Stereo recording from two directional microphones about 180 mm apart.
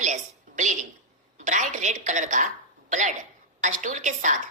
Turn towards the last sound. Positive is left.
turn(degrees=-45)  # may be behind; listen again after turning